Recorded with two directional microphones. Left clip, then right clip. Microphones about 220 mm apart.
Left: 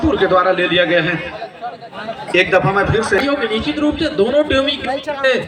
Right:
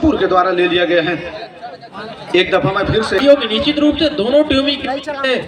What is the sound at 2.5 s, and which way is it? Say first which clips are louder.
Speech: left 1 dB; 45° right (ahead or behind).